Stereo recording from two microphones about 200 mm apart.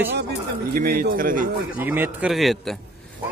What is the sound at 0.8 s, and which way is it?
Speech, 45° right (ahead or behind).